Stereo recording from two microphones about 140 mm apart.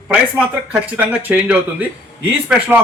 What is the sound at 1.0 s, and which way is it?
A man's voice, 10° right (ahead or behind).